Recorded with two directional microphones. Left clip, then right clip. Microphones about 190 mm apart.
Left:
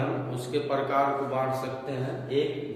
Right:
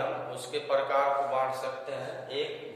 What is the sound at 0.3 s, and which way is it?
A man's voice, 15° right (ahead or behind).